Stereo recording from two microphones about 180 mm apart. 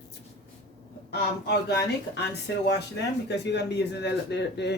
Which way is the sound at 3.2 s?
70° left (ahead or behind).